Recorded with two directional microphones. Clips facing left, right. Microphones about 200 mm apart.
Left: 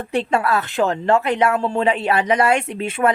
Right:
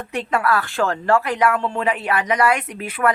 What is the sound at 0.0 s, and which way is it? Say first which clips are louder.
A woman's voice: left 2 dB; 30° left (ahead or behind).